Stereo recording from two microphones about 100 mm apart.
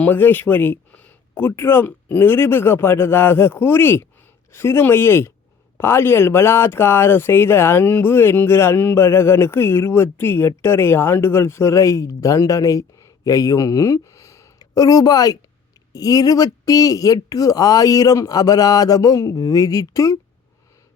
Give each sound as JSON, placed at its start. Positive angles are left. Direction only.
{"t": 0.0, "sound": "speech", "side_deg": 20}